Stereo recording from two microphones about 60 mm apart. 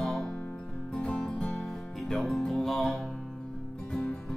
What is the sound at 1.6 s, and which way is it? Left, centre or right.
Music, centre.